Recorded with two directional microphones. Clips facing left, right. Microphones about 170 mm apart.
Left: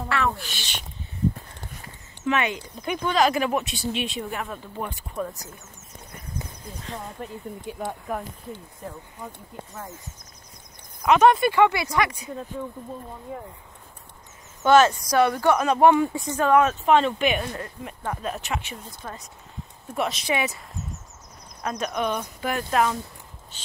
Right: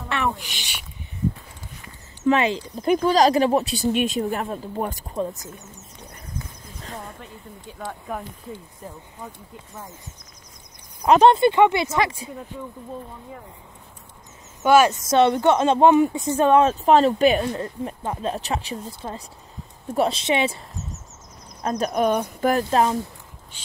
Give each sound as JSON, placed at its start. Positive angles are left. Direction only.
{"t": 0.1, "sound": "speech", "side_deg": -15}
{"t": 2.2, "sound": "speech", "side_deg": -30}
{"t": 5.1, "sound": "speech", "side_deg": -20}
{"t": 7.7, "sound": "speech", "side_deg": 15}
{"t": 11.0, "sound": "speech", "side_deg": -30}
{"t": 14.6, "sound": "speech", "side_deg": -10}
{"t": 14.9, "sound": "speech", "side_deg": -25}
{"t": 21.6, "sound": "speech", "side_deg": -35}
{"t": 23.5, "sound": "a sound", "side_deg": -10}